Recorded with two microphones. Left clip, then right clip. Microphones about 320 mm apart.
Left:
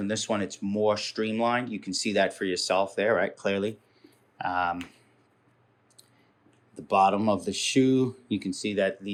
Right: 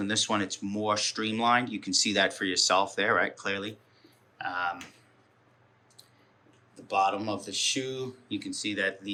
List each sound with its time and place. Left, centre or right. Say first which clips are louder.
0.0 s speech: right 1 dB; centre
6.7 s speech: left 4 dB; centre